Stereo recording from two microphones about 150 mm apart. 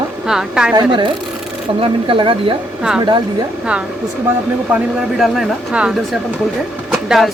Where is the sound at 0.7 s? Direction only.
30° right (ahead or behind).